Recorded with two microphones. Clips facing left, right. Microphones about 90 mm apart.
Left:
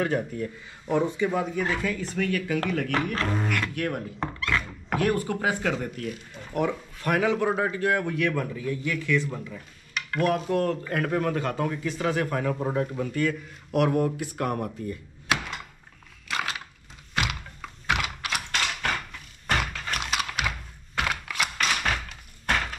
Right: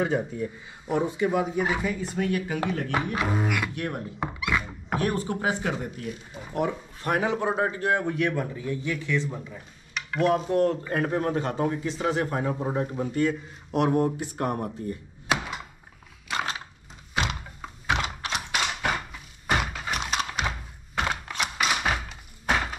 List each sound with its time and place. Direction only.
0.0 s speech: 15° right (ahead or behind)
6.0 s speech: 5° right (ahead or behind)
6.5 s speech: 20° right (ahead or behind)
14.8 s speech: 90° left
15.2 s thunk: 5° right (ahead or behind)
17.9 s typing: 10° left (ahead or behind)
18.3 s a sound: 10° right (ahead or behind)
20.0 s a sound: centre (ahead or behind)
21.0 s typing: 30° right (ahead or behind)
21.5 s thunk: 10° right (ahead or behind)